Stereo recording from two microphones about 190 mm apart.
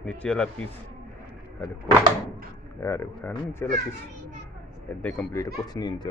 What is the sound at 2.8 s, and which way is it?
Speech, 10° left (ahead or behind).